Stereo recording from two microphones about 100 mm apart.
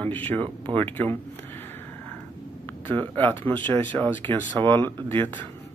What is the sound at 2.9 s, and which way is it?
Speech, 15° left (ahead or behind).